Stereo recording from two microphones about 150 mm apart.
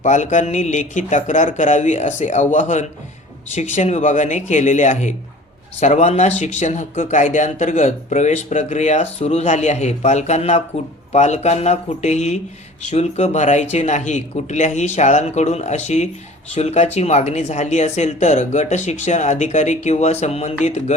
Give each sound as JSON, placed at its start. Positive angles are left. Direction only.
{"t": 0.0, "sound": "speech", "side_deg": 55}